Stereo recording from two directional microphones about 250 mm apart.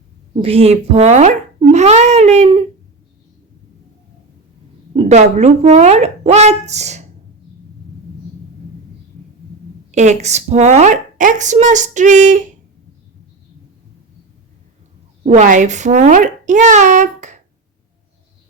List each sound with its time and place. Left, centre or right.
0.4 s a woman's voice: right
4.9 s a woman's voice: right
9.9 s a woman's voice: right
15.2 s a woman's voice: right